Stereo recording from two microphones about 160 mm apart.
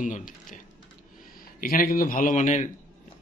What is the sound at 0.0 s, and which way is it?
Speech, 55° left (ahead or behind).